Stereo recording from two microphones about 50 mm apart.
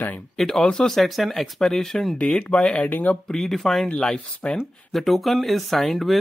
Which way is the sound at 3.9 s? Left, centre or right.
Centre.